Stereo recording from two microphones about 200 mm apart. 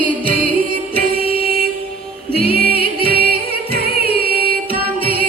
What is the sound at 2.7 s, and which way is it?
Music, 50° right (ahead or behind).